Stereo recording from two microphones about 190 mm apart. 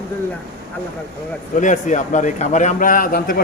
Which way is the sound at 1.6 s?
40° left (ahead or behind).